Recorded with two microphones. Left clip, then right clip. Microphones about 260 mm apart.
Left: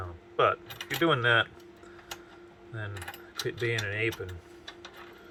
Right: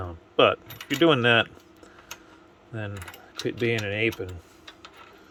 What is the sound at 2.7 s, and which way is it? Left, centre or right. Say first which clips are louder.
Speech: right 3 dB; right.